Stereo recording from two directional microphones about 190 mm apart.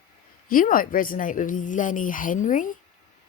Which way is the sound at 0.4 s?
45° left (ahead or behind).